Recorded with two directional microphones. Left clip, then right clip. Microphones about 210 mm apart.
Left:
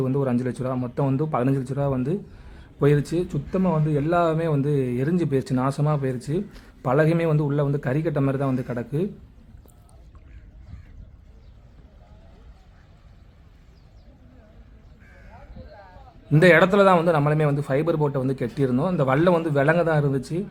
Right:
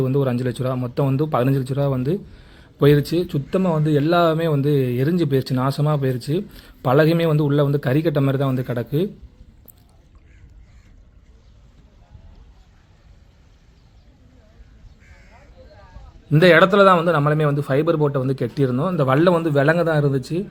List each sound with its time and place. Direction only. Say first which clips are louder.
0.0 s speech: right 3 dB; 10° right (ahead or behind)
16.3 s a man's voice: right 3 dB; centre (ahead or behind)